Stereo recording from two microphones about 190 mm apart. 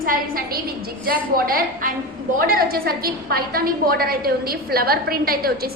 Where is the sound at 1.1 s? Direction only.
50° right (ahead or behind).